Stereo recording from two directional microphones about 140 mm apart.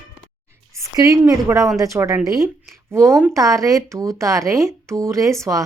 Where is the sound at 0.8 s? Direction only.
25° right (ahead or behind).